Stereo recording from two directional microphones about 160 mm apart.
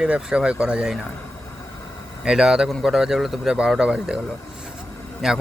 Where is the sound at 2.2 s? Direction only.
5° right (ahead or behind).